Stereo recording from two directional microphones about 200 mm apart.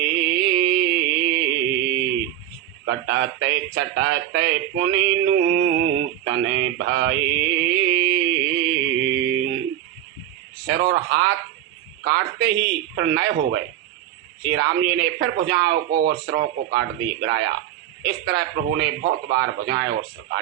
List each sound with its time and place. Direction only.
0.0 s music: 60° right (ahead or behind)
0.3 s a sound: 55° right (ahead or behind)
2.8 s speech: 60° right (ahead or behind)
8.2 s music: 65° right (ahead or behind)
10.7 s speech: 55° right (ahead or behind)